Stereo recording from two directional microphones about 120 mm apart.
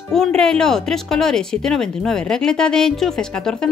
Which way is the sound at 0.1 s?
5° left (ahead or behind).